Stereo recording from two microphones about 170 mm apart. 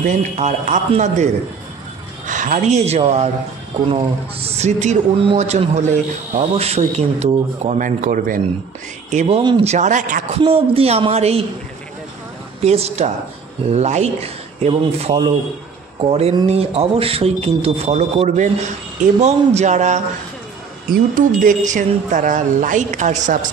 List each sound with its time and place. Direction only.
0.0 s a man's voice: 45° right (ahead or behind)
9.4 s speech: 25° right (ahead or behind)
9.7 s speech: 45° right (ahead or behind)
10.3 s a man's voice: 35° right (ahead or behind)
12.6 s a man's voice: 40° right (ahead or behind)